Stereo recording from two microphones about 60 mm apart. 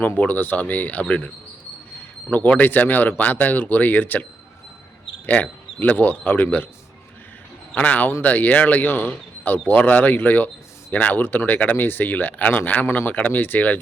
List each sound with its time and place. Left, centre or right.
0.0 s speech: left
2.3 s speech: left
7.8 s speech: left
12.8 s speech: left
13.1 s speech: left